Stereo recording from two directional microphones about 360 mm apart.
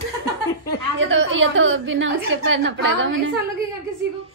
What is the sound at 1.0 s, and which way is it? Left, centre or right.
A woman's voice, right.